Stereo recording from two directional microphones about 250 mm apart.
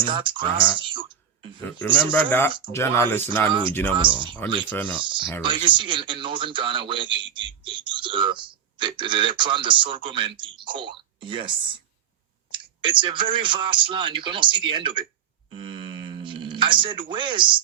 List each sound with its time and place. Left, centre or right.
0.0 s a man's voice: centre
2.1 s speech: centre
4.4 s a man's voice: centre
4.7 s speech: centre
5.4 s a man's voice: centre
15.4 s a sound: centre